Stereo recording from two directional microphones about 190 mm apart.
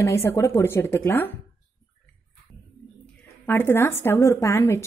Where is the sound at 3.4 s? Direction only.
10° left (ahead or behind).